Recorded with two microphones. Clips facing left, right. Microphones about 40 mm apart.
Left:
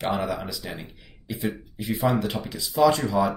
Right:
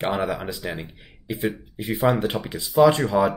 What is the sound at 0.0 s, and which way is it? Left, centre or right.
Speech, right.